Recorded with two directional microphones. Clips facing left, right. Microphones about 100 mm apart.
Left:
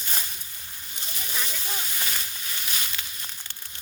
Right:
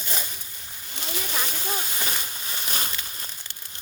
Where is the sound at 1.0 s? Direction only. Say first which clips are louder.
Right 8 dB; 90° right.